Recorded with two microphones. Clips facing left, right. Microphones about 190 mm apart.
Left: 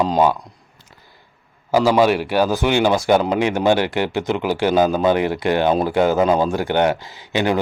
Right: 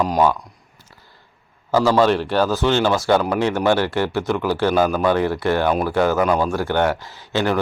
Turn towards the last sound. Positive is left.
turn(degrees=15)  # may be behind; listen again after turning